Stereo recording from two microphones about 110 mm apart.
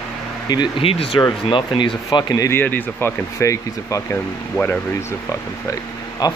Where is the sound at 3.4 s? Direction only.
30° left (ahead or behind).